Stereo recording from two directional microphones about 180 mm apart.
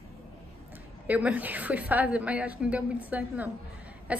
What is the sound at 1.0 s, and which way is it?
A woman's voice, 10° right (ahead or behind).